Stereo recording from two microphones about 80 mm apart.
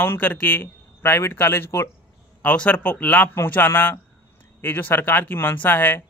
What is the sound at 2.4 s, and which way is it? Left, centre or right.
Speech, centre.